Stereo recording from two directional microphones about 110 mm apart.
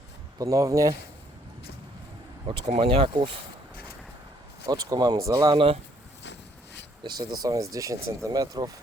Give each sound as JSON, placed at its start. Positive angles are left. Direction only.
{"t": 0.3, "sound": "speech", "side_deg": -30}
{"t": 2.6, "sound": "speech", "side_deg": -60}
{"t": 4.6, "sound": "speech", "side_deg": -35}
{"t": 5.5, "sound": "speech", "side_deg": -55}
{"t": 7.0, "sound": "speech", "side_deg": -40}